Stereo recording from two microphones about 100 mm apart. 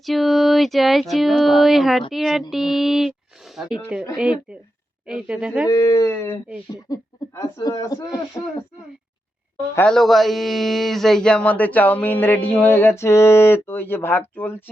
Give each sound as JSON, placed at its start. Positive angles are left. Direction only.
{"t": 0.0, "sound": "speech", "side_deg": 0}
{"t": 5.6, "sound": "speech", "side_deg": 30}
{"t": 6.8, "sound": "speech", "side_deg": 35}
{"t": 9.8, "sound": "speech", "side_deg": 5}